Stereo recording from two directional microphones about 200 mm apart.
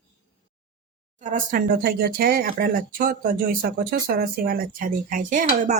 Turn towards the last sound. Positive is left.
turn(degrees=-40)  # may be behind; listen again after turning